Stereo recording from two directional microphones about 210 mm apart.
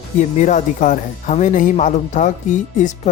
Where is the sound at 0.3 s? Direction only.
35° left (ahead or behind).